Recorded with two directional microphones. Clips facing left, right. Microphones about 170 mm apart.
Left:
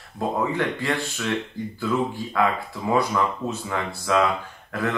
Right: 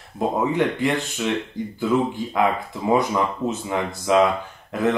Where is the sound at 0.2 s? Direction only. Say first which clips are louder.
Right 3 dB; 20° right (ahead or behind).